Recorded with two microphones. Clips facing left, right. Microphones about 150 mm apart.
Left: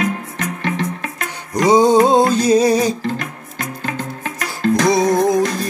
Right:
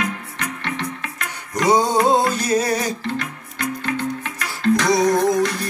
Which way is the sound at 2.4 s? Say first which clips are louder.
Left 7 dB; 15° left (ahead or behind).